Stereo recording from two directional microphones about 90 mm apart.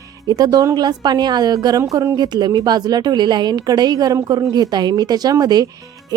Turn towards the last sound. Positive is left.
turn(degrees=-45)  # may be behind; listen again after turning